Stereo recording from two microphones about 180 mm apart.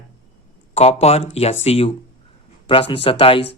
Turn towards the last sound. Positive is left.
turn(degrees=30)  # may be behind; listen again after turning